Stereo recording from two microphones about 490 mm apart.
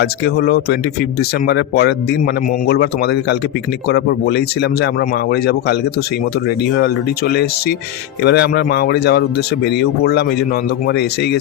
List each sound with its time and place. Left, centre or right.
0.0 s speech: centre
6.7 s speech: centre